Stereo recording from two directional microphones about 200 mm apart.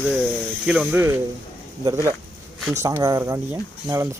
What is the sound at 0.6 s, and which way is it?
Speech, 5° right (ahead or behind).